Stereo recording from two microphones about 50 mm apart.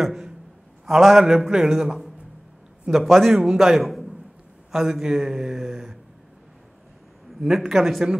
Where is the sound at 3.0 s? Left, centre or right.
Centre.